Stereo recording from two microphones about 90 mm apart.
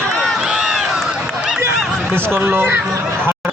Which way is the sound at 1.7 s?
5° left (ahead or behind).